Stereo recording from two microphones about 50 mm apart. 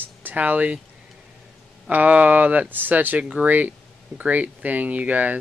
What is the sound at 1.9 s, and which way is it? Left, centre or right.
Speech, right.